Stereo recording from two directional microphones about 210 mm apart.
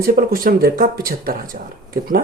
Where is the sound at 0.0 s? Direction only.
45° right (ahead or behind).